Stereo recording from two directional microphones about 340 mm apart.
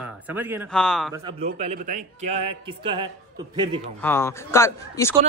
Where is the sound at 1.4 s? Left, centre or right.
Right.